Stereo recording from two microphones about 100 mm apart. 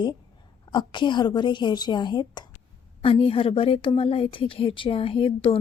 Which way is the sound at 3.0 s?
70° left (ahead or behind).